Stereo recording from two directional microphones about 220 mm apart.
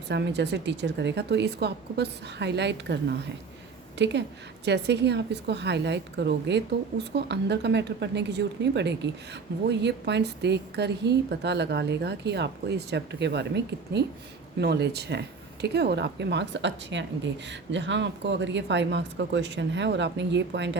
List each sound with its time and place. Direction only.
0.1 s a woman's voice: 50° right (ahead or behind)